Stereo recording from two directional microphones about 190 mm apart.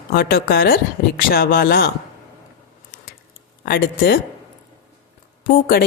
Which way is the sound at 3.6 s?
55° left (ahead or behind).